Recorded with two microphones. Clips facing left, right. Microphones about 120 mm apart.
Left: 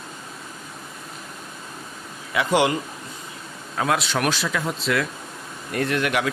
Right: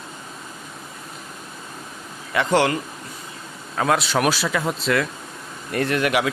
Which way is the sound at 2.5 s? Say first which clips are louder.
Right 1 dB; 15° left (ahead or behind).